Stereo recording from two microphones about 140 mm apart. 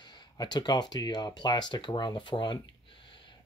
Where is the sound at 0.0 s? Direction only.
30° left (ahead or behind).